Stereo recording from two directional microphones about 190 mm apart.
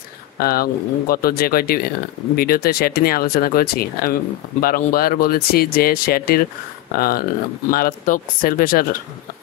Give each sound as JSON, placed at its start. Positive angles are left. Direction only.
{"t": 0.4, "sound": "speech", "side_deg": 50}